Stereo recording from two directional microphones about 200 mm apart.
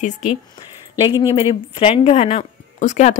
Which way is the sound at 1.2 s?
25° left (ahead or behind).